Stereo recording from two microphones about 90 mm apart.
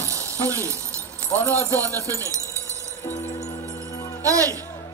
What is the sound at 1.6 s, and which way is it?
Jingle bell, 35° right (ahead or behind).